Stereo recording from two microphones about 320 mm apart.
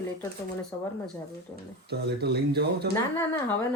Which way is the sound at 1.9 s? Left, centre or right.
Right.